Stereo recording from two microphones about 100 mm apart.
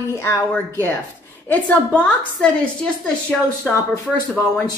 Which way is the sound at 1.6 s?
10° left (ahead or behind).